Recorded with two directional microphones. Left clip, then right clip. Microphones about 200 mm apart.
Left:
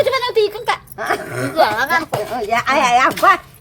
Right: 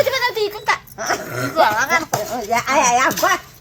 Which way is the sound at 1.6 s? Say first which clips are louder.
Even; 55° left (ahead or behind).